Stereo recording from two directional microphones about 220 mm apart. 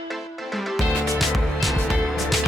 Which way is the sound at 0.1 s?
Centre (ahead or behind).